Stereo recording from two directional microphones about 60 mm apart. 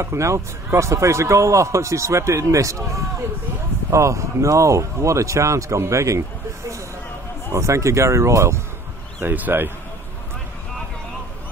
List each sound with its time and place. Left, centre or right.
0.0 s speech: right
7.5 s speech: right
9.2 s speech: right